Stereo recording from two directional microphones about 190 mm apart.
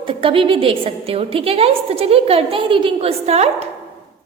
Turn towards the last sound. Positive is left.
turn(degrees=-35)  # may be behind; listen again after turning